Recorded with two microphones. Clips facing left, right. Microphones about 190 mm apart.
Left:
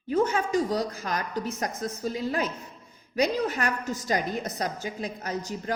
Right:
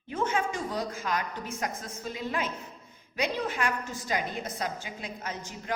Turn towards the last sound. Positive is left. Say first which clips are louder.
# left 6 dB
turn(degrees=40)  # may be behind; listen again after turning